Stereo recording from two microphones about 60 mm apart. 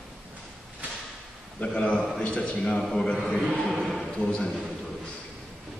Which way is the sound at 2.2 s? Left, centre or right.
Left.